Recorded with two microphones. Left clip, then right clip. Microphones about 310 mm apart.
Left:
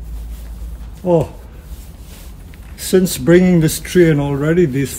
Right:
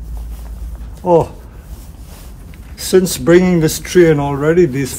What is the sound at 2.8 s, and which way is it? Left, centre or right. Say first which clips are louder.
Speech: right 2 dB; centre.